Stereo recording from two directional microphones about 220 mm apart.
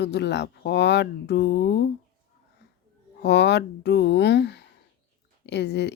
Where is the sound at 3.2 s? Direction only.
50° left (ahead or behind).